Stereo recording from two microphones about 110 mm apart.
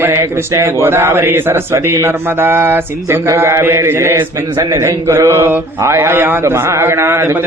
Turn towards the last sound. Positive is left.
turn(degrees=-25)  # may be behind; listen again after turning